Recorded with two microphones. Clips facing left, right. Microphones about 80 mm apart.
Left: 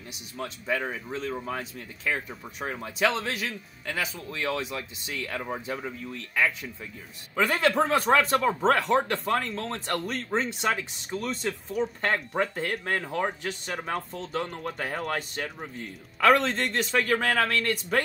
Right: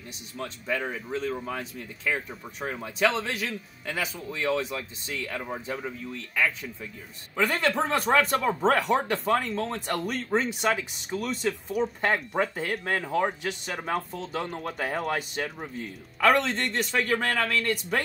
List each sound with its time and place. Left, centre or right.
0.4 s speech: centre